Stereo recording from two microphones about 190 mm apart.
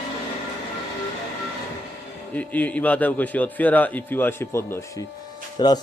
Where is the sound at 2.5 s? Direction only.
10° left (ahead or behind).